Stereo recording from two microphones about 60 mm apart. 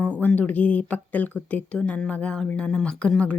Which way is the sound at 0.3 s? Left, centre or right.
Left.